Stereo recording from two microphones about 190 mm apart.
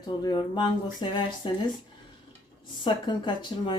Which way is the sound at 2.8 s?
25° left (ahead or behind).